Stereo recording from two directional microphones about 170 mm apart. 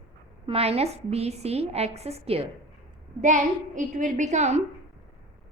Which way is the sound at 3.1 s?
45° right (ahead or behind).